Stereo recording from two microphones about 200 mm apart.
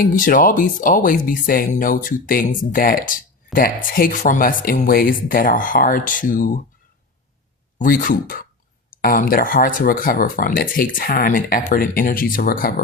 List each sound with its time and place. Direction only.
0.0 s speech: 45° left (ahead or behind)
7.8 s speech: 45° left (ahead or behind)